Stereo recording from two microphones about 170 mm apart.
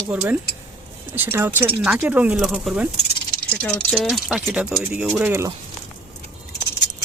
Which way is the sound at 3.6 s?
10° left (ahead or behind).